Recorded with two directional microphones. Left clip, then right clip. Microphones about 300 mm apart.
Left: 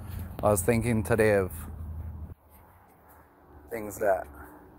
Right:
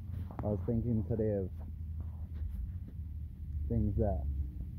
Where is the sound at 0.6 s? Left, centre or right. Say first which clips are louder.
Left 10 dB; left.